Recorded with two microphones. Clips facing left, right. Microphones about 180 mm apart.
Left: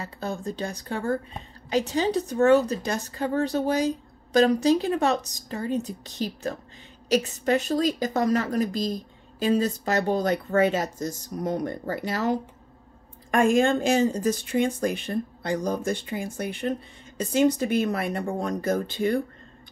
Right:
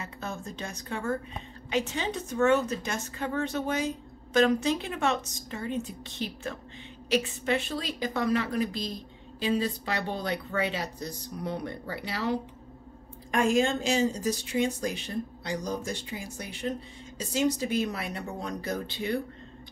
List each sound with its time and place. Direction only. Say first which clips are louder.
0.0 s a woman's voice: left 6 dB; 35° left (ahead or behind)